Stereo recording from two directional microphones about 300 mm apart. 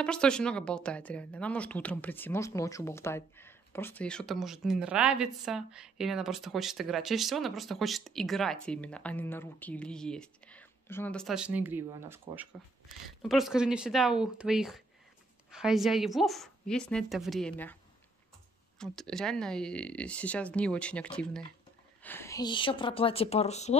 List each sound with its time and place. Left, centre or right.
0.0 s speech: centre
18.8 s speech: centre; by 23.8 s left